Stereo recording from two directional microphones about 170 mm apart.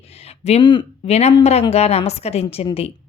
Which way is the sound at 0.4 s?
40° left (ahead or behind).